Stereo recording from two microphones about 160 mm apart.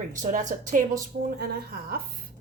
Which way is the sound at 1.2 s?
70° right (ahead or behind).